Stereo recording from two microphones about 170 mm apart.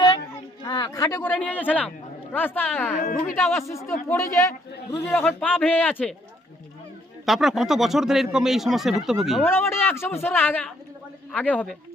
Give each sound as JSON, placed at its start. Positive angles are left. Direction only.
{"t": 0.6, "sound": "speech", "side_deg": 25}
{"t": 3.0, "sound": "speech", "side_deg": 50}
{"t": 3.3, "sound": "a man's voice", "side_deg": 15}
{"t": 5.0, "sound": "speech", "side_deg": 5}
{"t": 7.3, "sound": "speech", "side_deg": 0}
{"t": 9.4, "sound": "speech", "side_deg": 15}